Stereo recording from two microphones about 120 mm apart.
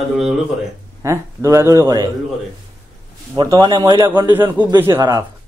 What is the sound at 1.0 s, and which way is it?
Speech, 25° right (ahead or behind).